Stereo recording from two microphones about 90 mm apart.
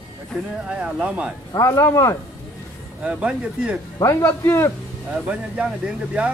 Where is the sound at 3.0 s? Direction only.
10° right (ahead or behind).